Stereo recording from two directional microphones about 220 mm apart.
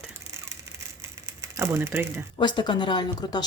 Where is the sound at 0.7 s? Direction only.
10° right (ahead or behind).